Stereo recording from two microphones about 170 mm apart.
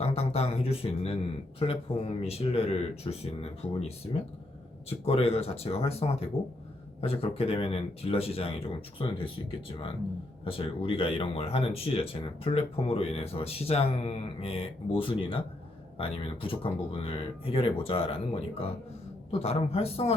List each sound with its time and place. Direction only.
0.0 s speech: 35° left (ahead or behind)
19.3 s speech: 35° left (ahead or behind)